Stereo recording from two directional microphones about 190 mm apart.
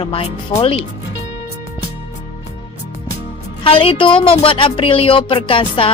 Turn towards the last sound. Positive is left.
turn(degrees=25)  # may be behind; listen again after turning